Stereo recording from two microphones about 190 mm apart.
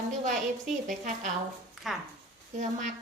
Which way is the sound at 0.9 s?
40° right (ahead or behind).